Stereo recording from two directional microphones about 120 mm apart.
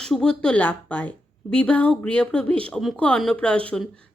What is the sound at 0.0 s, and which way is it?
A woman's voice, 5° left (ahead or behind).